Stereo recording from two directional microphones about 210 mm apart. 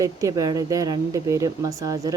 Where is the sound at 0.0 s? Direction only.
15° right (ahead or behind).